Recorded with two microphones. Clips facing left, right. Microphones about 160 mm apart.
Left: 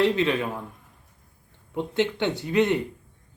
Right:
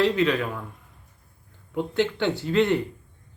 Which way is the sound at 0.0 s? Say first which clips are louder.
Even; 25° left (ahead or behind).